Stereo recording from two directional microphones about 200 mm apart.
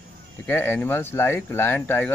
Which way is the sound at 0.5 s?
10° left (ahead or behind).